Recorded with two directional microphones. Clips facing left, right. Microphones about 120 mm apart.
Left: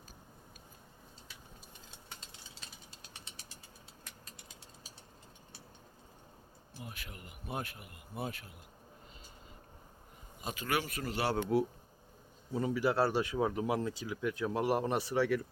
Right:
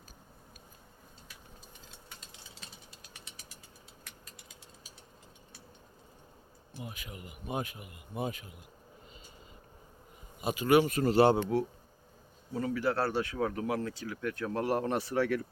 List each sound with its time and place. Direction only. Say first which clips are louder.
6.8 s a man's voice: right 4 dB; 5° right (ahead or behind)
10.4 s a man's voice: right 10 dB; 15° right (ahead or behind)
12.5 s speech: even; 15° left (ahead or behind)